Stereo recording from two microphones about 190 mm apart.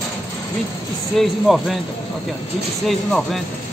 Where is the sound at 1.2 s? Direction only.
Centre (ahead or behind).